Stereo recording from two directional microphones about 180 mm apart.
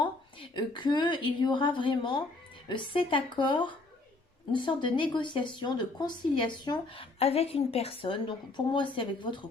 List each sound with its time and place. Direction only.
0.0 s a woman's voice: 25° left (ahead or behind)